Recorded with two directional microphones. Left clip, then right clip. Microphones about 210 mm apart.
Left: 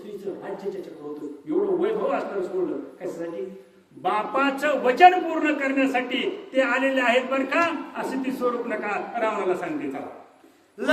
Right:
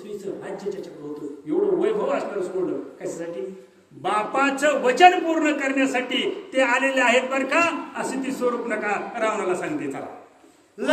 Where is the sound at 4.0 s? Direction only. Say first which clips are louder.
Right 1 dB; 15° right (ahead or behind).